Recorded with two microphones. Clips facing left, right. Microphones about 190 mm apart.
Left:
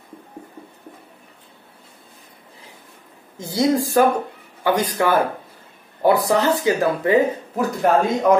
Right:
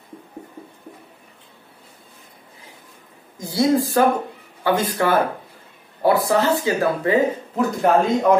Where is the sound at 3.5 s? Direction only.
15° left (ahead or behind).